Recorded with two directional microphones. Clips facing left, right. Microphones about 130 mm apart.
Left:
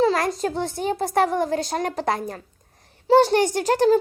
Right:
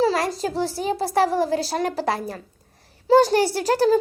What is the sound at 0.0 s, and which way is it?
A woman's voice, 30° right (ahead or behind).